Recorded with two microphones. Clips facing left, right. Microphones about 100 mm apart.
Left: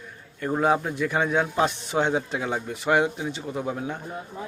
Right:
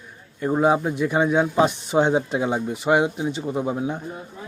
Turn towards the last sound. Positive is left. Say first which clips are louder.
# right 5 dB
turn(degrees=-20)  # may be behind; listen again after turning